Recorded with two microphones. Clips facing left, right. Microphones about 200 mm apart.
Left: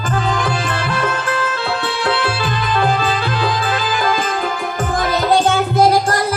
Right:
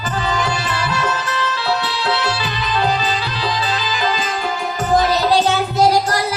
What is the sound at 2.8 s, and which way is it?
Music, 50° left (ahead or behind).